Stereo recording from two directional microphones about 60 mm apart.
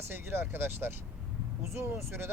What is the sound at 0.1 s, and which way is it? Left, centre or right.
Speech, right.